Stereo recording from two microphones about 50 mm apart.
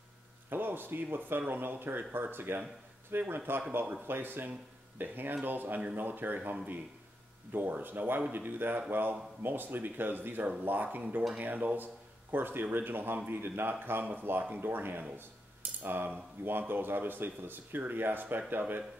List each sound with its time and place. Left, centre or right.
0.5 s a man's voice: right